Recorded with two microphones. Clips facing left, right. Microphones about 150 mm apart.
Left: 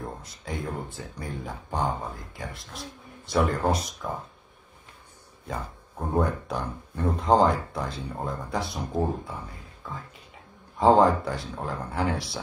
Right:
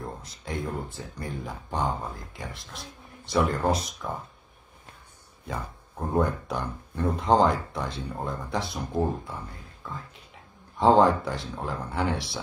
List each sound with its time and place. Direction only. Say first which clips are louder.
0.0 s speech: even; centre (ahead or behind)
5.5 s speech: even; centre (ahead or behind)